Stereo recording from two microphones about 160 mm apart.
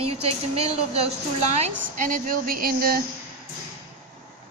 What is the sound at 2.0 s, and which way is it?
Speech, 55° right (ahead or behind).